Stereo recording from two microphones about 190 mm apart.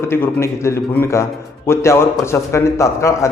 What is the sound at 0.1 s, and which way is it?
A man's voice, 15° left (ahead or behind).